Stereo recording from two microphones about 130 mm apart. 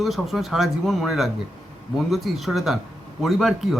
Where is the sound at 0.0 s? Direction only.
Centre (ahead or behind).